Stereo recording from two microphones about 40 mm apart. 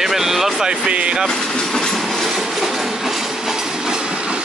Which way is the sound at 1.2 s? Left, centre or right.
Centre.